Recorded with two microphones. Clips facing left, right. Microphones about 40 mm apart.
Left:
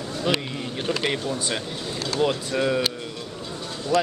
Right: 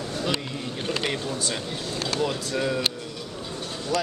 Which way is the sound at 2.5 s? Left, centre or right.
Centre.